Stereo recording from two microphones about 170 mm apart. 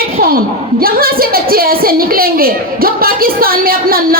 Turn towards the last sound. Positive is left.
turn(degrees=-60)  # may be behind; listen again after turning